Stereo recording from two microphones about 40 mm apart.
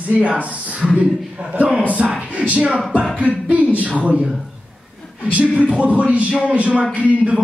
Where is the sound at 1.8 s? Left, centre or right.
Right.